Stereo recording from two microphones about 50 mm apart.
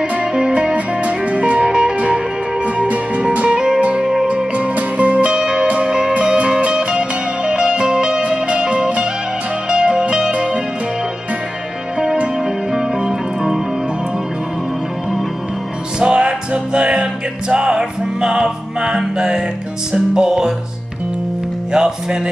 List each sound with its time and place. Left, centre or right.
0.3 s music: centre
4.6 s music: right
12.4 s music: centre
16.0 s music: right
21.7 s music: centre